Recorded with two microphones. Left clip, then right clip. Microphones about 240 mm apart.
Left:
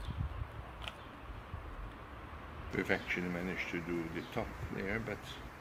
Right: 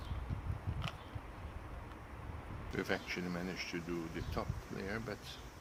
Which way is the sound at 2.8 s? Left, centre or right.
Centre.